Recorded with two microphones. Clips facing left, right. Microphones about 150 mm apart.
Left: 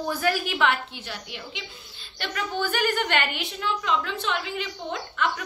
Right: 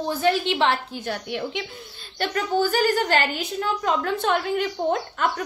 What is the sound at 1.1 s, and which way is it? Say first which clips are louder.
Speech: right 14 dB; 55° right (ahead or behind).